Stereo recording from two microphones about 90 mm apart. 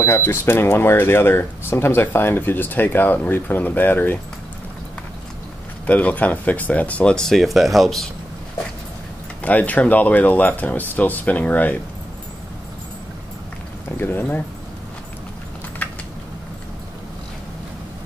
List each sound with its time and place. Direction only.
0.0 s speech: 30° left (ahead or behind)
5.9 s speech: 15° left (ahead or behind)
9.4 s speech: 15° left (ahead or behind)
13.9 s speech: 20° left (ahead or behind)
15.8 s a sound: 20° left (ahead or behind)